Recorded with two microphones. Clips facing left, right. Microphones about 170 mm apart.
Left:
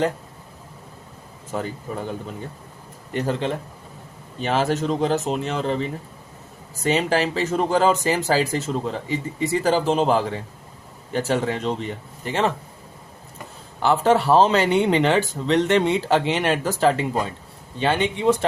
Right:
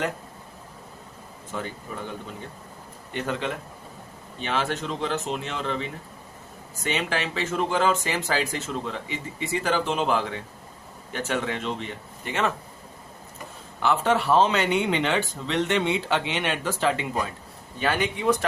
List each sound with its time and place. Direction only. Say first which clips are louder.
1.9 s speech: left 6 dB; 40° left (ahead or behind)
3.1 s speech: left 5 dB; 35° left (ahead or behind)
13.8 s speech: left 5 dB; 35° left (ahead or behind)